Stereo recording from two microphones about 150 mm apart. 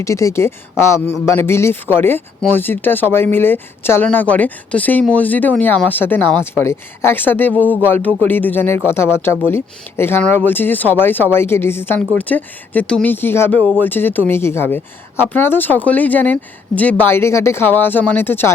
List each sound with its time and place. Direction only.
0.0 s speech: 20° left (ahead or behind)